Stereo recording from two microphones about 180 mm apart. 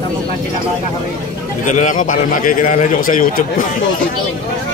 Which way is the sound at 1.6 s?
40° left (ahead or behind).